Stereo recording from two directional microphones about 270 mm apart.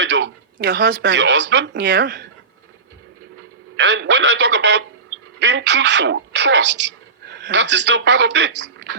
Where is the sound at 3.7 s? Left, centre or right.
Right.